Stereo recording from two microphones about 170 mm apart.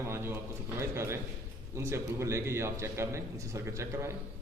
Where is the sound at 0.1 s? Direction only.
15° right (ahead or behind).